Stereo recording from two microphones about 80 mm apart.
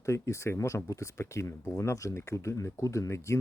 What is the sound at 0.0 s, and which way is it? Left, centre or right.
Speech, left.